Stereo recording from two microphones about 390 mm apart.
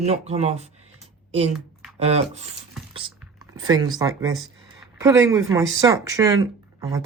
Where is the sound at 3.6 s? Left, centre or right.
Centre.